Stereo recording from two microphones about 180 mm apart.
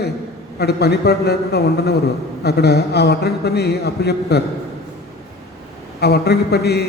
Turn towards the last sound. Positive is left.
turn(degrees=60)  # may be behind; listen again after turning